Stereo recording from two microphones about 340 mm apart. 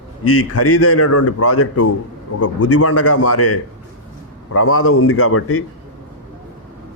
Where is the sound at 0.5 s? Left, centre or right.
Left.